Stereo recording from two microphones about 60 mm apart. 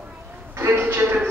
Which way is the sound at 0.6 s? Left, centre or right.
Right.